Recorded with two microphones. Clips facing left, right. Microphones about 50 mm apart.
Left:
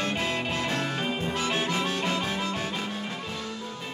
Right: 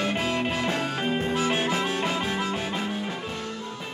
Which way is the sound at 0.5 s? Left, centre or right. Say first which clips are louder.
Right 2 dB; centre.